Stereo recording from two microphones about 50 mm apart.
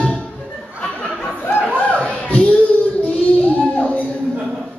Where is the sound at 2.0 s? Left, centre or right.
Left.